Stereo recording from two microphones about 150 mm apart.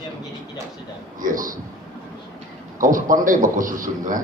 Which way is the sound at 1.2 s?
65° right (ahead or behind).